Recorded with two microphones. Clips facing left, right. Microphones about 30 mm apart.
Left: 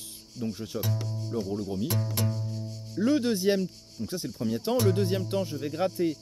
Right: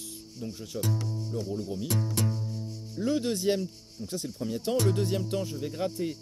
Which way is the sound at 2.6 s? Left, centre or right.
Left.